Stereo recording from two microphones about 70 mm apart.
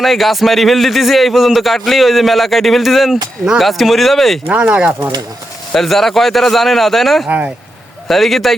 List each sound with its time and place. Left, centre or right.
0.0 s a man's voice: centre
4.4 s speech: right
5.7 s a man's voice: centre
7.3 s speech: right
8.0 s a man's voice: centre